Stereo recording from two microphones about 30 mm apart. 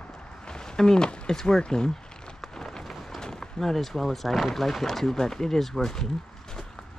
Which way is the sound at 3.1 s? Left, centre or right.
Left.